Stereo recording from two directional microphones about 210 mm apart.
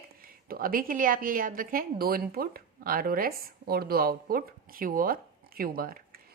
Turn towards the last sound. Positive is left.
turn(degrees=-45)  # may be behind; listen again after turning